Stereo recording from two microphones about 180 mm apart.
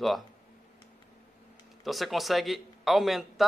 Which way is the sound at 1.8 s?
Centre (ahead or behind).